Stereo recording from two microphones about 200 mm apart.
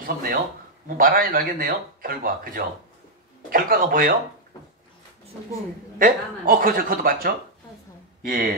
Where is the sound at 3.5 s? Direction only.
45° right (ahead or behind).